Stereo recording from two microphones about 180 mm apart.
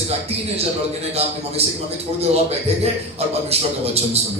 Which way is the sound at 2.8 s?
35° right (ahead or behind).